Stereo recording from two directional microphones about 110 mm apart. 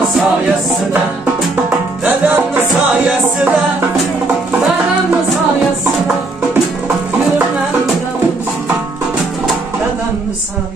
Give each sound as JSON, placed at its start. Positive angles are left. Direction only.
{"t": 2.0, "sound": "music", "side_deg": -15}